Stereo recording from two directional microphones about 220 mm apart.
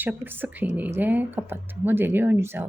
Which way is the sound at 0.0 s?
10° right (ahead or behind).